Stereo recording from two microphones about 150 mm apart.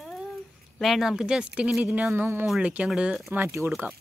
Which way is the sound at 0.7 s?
Centre (ahead or behind).